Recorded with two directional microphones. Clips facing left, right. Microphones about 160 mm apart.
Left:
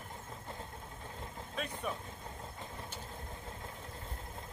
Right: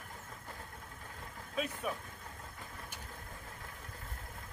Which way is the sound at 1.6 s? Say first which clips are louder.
Right 4 dB; 5° right (ahead or behind).